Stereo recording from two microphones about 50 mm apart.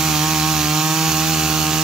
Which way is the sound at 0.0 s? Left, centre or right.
Centre.